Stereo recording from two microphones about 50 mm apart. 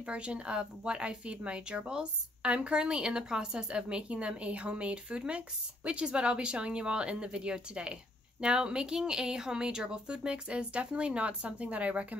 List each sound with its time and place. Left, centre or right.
0.0 s speech: right